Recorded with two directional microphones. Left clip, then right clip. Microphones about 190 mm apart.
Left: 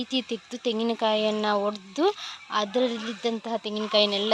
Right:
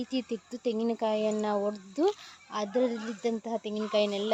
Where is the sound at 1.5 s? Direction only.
15° left (ahead or behind).